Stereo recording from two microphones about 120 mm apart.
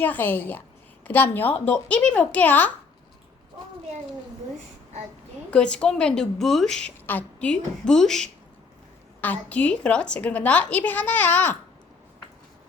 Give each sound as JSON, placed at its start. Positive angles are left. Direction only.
{"t": 0.0, "sound": "a woman's voice", "side_deg": 15}
{"t": 5.5, "sound": "a woman's voice", "side_deg": 10}
{"t": 9.2, "sound": "a woman's voice", "side_deg": 15}